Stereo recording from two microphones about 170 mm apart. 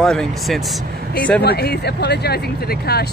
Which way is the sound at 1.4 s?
70° left (ahead or behind).